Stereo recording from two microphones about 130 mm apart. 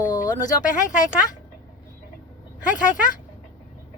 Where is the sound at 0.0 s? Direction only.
30° left (ahead or behind).